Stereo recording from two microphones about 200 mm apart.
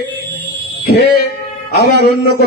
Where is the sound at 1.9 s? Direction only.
55° right (ahead or behind).